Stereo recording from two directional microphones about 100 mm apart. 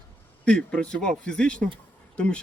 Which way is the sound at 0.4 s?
10° left (ahead or behind).